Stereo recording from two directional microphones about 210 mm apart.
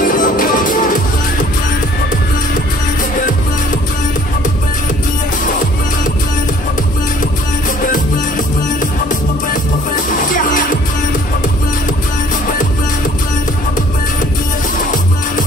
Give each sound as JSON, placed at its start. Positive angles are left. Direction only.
{"t": 0.0, "sound": "music", "side_deg": 40}
{"t": 9.9, "sound": "music", "side_deg": 40}